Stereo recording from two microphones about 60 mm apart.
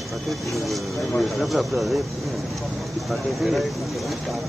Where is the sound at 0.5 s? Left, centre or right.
Centre.